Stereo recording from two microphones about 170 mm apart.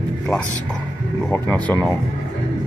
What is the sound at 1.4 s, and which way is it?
Speech, 10° left (ahead or behind).